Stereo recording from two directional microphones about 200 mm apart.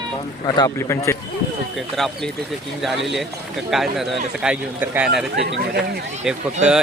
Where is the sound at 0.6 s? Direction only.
15° left (ahead or behind).